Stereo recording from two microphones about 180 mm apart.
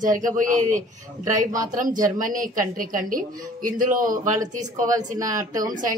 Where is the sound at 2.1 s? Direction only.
50° right (ahead or behind).